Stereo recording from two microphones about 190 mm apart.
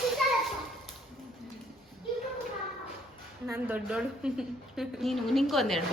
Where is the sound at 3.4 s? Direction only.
10° right (ahead or behind).